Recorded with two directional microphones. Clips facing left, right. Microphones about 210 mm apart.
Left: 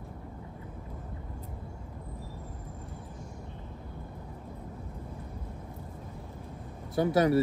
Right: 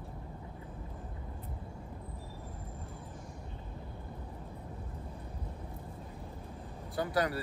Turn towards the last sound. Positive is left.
turn(degrees=25)  # may be behind; listen again after turning